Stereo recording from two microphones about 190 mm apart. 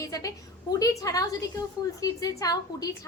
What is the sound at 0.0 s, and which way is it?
A woman's voice, 20° left (ahead or behind).